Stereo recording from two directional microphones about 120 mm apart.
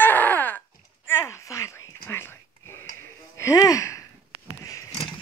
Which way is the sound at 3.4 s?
25° left (ahead or behind).